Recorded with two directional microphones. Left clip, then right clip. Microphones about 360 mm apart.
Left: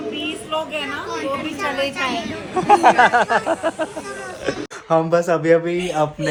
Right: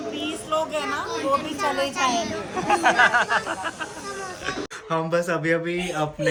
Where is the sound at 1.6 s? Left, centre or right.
Right.